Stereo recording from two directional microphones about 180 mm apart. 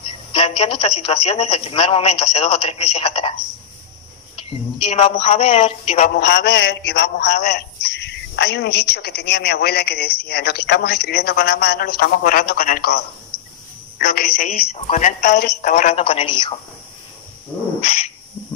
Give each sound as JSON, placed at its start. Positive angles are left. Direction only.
{"t": 0.3, "sound": "a woman's voice", "side_deg": 30}
{"t": 4.8, "sound": "speech", "side_deg": 40}
{"t": 7.2, "sound": "a woman's voice", "side_deg": 40}
{"t": 7.5, "sound": "a woman's voice", "side_deg": 70}
{"t": 14.5, "sound": "a woman's voice", "side_deg": 40}
{"t": 17.8, "sound": "dog", "side_deg": 35}